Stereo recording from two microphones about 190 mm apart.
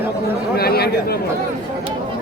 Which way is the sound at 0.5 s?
55° left (ahead or behind).